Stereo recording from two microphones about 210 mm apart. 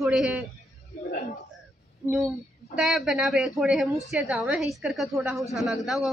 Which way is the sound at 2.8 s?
Centre (ahead or behind).